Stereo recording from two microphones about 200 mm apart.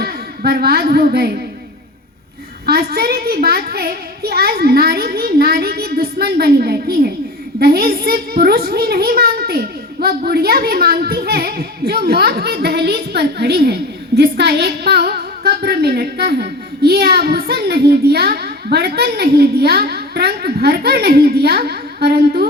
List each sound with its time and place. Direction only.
0.0 s a woman's voice: 50° right (ahead or behind)
2.6 s a child's voice: 50° right (ahead or behind)